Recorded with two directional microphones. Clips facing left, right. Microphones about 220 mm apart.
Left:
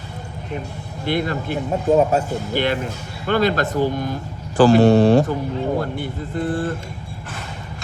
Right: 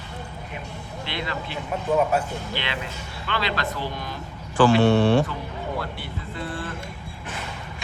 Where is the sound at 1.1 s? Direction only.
50° left (ahead or behind).